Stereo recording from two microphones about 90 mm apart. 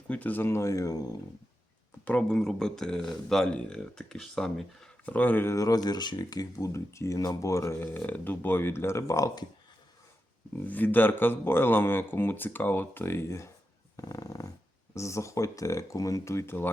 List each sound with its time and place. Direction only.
0.1 s speech: 20° left (ahead or behind); by 1.0 s 40° left (ahead or behind)
2.3 s speech: 5° left (ahead or behind)
5.0 s speech: 20° left (ahead or behind)
5.5 s speech: 45° left (ahead or behind)
7.9 s speech: 20° left (ahead or behind); by 9.5 s 45° left (ahead or behind)
10.7 s speech: 20° left (ahead or behind)
13.9 s dog: 40° left (ahead or behind)
14.9 s speech: 35° left (ahead or behind)